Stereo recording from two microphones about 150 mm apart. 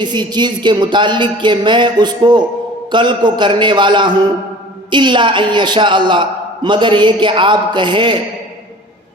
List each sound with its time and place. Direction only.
0.0 s a man's voice: 30° right (ahead or behind)